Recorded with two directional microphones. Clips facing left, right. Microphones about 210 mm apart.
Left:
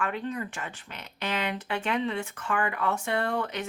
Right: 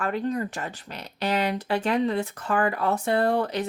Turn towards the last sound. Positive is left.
turn(degrees=-35)  # may be behind; listen again after turning